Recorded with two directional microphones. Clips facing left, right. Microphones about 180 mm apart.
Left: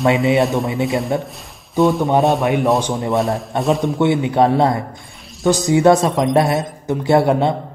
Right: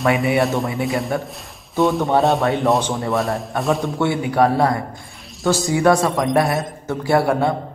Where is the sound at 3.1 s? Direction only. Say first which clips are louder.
Left 3 dB; centre (ahead or behind).